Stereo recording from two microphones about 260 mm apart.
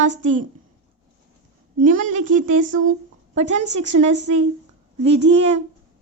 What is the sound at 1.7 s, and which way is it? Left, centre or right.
A woman's voice, right.